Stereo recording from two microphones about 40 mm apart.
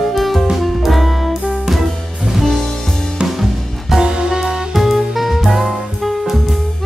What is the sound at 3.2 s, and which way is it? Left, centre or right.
Music, centre.